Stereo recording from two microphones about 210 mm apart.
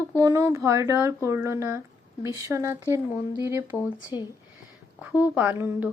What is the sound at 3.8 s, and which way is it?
Speech, 20° left (ahead or behind).